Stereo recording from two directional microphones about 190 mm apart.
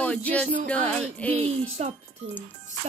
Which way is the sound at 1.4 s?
35° right (ahead or behind).